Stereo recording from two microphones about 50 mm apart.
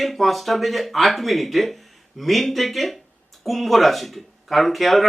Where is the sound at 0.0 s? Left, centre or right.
Centre.